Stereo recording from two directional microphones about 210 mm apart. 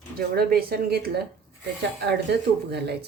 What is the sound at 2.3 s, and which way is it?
Speech, 50° right (ahead or behind).